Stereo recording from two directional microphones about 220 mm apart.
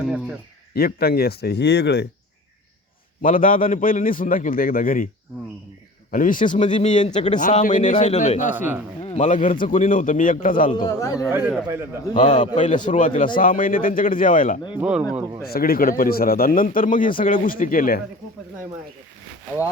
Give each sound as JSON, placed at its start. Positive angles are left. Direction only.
{"t": 0.7, "sound": "speech", "side_deg": 45}
{"t": 3.2, "sound": "a man's voice", "side_deg": 40}
{"t": 6.1, "sound": "a man's voice", "side_deg": 35}
{"t": 8.5, "sound": "a man's voice", "side_deg": -10}
{"t": 9.0, "sound": "a man's voice", "side_deg": 30}
{"t": 10.8, "sound": "a man's voice", "side_deg": 15}
{"t": 11.3, "sound": "a man's voice", "side_deg": -10}
{"t": 12.2, "sound": "a man's voice", "side_deg": 35}
{"t": 14.8, "sound": "speech", "side_deg": -5}
{"t": 15.4, "sound": "a man's voice", "side_deg": 45}